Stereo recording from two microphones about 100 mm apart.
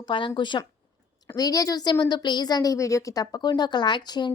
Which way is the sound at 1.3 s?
35° left (ahead or behind).